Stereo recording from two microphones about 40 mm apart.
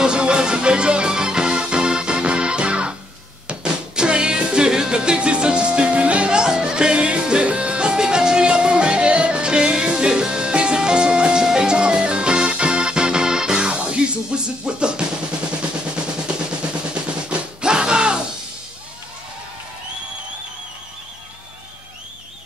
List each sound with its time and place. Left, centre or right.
0.0 s music: right
16.9 s music: right